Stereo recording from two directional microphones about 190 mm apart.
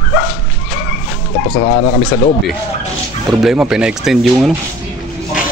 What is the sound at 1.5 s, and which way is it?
Speech, 45° left (ahead or behind).